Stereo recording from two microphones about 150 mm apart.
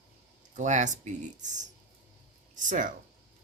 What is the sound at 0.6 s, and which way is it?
Speech, 55° right (ahead or behind).